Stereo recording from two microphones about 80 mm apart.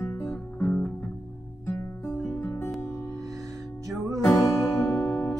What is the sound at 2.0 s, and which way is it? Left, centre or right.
Music, left.